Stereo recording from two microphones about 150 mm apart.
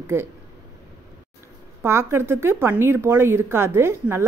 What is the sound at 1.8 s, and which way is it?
Speech, 15° right (ahead or behind).